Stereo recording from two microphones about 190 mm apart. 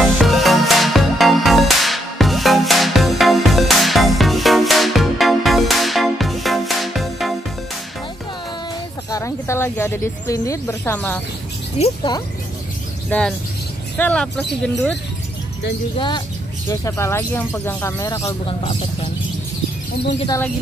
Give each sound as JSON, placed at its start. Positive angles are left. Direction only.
{"t": 0.0, "sound": "music", "side_deg": 0}
{"t": 9.1, "sound": "speech", "side_deg": 15}
{"t": 11.8, "sound": "speech", "side_deg": 25}
{"t": 13.1, "sound": "speech", "side_deg": 10}
{"t": 16.6, "sound": "speech", "side_deg": 15}